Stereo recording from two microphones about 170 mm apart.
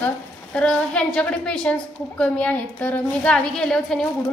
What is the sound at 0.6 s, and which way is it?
A woman's voice, 5° left (ahead or behind).